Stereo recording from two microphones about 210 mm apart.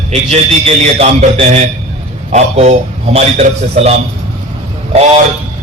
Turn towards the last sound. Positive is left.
turn(degrees=-30)  # may be behind; listen again after turning